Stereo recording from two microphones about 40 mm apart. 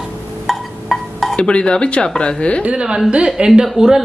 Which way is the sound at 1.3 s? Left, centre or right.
Left.